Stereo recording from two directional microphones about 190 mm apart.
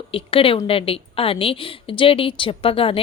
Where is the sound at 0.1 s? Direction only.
30° left (ahead or behind).